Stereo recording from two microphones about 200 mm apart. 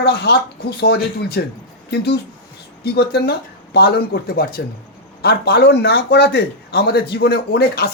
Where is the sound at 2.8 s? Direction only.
55° left (ahead or behind).